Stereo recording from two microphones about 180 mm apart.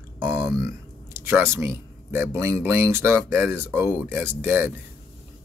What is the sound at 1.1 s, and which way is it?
Speech, 15° right (ahead or behind).